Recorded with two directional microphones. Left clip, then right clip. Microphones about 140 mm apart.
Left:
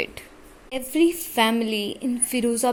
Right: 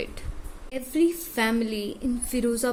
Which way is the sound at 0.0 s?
25° left (ahead or behind).